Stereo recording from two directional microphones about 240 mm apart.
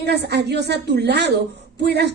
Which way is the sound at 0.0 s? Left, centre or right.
Right.